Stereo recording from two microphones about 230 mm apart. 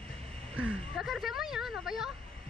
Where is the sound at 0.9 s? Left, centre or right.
Centre.